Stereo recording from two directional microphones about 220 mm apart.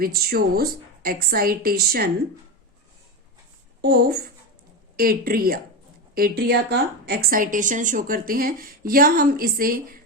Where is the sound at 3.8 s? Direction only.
45° right (ahead or behind).